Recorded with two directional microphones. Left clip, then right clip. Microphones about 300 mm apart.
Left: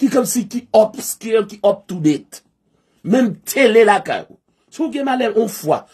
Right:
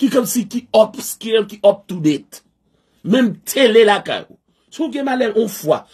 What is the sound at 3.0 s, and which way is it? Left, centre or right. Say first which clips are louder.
Speech: even; centre.